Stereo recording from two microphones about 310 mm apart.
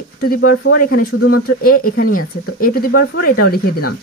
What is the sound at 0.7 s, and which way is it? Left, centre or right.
Speech, left.